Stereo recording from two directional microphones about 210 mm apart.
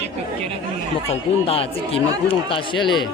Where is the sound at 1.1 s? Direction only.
25° left (ahead or behind).